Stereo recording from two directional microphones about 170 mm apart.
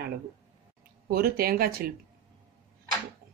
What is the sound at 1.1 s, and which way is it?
Speech, 60° right (ahead or behind).